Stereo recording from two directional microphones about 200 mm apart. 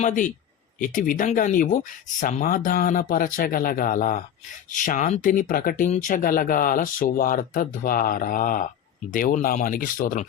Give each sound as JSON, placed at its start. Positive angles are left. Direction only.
{"t": 0.0, "sound": "speech", "side_deg": 40}